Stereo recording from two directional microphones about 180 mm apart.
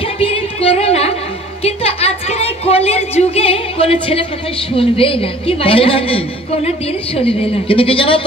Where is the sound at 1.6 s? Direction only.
35° left (ahead or behind).